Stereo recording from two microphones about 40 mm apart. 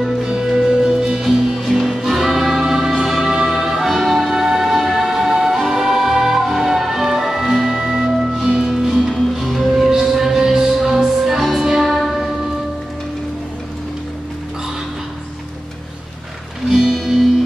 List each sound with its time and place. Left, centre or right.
0.0 s music: centre
16.7 s music: centre